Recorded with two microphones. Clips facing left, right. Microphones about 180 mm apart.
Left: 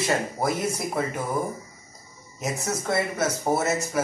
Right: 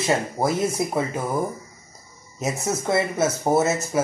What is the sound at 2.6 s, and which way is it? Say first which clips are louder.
Speech: right 4 dB; 20° right (ahead or behind).